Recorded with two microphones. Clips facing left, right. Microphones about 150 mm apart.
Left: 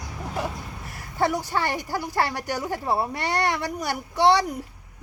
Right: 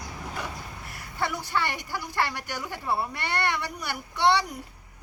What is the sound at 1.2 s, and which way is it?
A woman's voice, 40° left (ahead or behind).